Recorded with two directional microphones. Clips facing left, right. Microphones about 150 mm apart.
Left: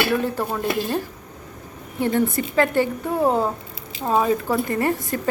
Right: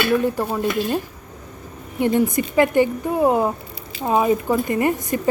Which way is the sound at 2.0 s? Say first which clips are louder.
Right 2 dB; 15° right (ahead or behind).